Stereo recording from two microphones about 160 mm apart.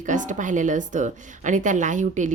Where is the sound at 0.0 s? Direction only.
50° right (ahead or behind).